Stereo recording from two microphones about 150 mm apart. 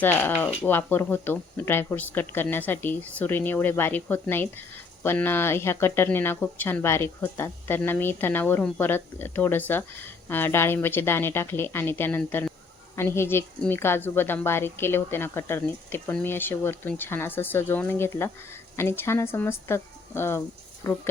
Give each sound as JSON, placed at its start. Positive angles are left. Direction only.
{"t": 0.0, "sound": "a woman's voice", "side_deg": 15}